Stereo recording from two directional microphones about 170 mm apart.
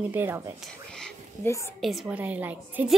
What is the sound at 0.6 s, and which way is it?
Whispering, 5° left (ahead or behind).